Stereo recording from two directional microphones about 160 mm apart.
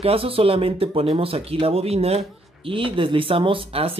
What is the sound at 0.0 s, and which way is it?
Speech, 35° right (ahead or behind).